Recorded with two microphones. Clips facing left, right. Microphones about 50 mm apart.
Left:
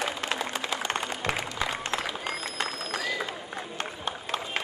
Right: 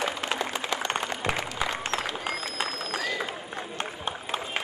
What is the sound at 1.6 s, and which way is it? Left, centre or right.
Applause, centre.